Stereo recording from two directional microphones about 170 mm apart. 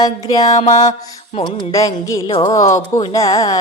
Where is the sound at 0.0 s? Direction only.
25° left (ahead or behind).